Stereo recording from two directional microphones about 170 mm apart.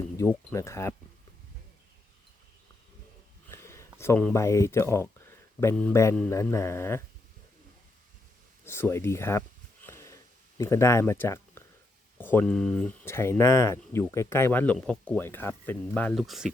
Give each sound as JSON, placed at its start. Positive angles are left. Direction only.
{"t": 0.2, "sound": "speech", "side_deg": 15}
{"t": 3.5, "sound": "speech", "side_deg": 15}
{"t": 8.6, "sound": "speech", "side_deg": 15}
{"t": 9.8, "sound": "sniff", "side_deg": 15}
{"t": 10.6, "sound": "speech", "side_deg": 15}